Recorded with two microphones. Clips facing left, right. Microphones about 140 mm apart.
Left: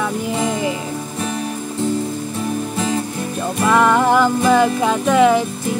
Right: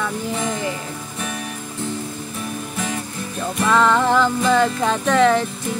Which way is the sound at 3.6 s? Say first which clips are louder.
Left 2 dB; 15° left (ahead or behind).